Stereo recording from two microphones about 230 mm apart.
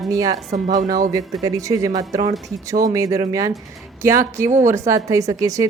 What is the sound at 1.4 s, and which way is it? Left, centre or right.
Speech, centre.